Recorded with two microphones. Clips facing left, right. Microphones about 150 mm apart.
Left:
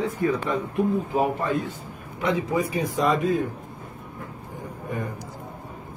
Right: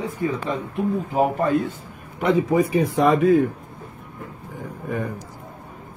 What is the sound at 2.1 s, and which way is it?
Speech, 55° right (ahead or behind).